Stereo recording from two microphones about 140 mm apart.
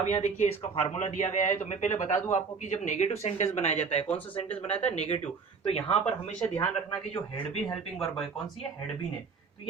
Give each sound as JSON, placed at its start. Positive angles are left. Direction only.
{"t": 0.0, "sound": "speech", "side_deg": 55}
{"t": 6.4, "sound": "speech", "side_deg": 5}